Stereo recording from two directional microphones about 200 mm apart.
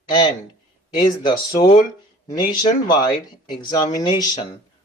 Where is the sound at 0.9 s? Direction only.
20° left (ahead or behind).